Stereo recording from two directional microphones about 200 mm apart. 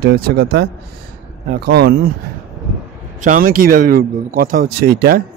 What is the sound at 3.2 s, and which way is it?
Speech, 40° right (ahead or behind).